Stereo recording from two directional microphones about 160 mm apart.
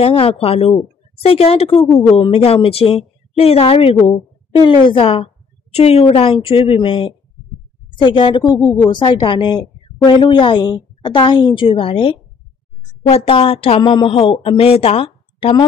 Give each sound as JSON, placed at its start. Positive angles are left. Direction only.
{"t": 0.0, "sound": "a woman's voice", "side_deg": 35}
{"t": 2.1, "sound": "a woman's voice", "side_deg": 25}
{"t": 2.4, "sound": "a woman's voice", "side_deg": 35}